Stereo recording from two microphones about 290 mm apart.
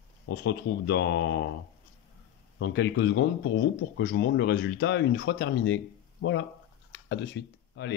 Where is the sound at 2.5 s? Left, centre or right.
Left.